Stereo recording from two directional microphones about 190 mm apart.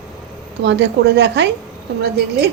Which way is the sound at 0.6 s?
65° right (ahead or behind).